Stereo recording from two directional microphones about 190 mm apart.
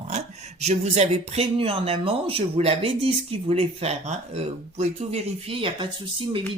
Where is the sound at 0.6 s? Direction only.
35° right (ahead or behind).